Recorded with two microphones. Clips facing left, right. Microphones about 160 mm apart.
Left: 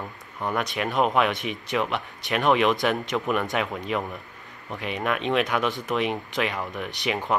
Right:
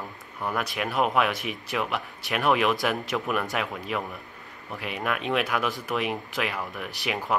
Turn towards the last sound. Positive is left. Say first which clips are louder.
# left 2 dB
turn(degrees=0)  # may be behind; listen again after turning